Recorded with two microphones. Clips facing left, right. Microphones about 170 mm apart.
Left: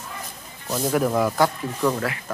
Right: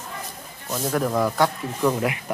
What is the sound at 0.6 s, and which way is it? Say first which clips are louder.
Speech: left 2 dB; 5° left (ahead or behind).